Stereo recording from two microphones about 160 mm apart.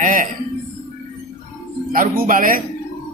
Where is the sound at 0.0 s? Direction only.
60° right (ahead or behind).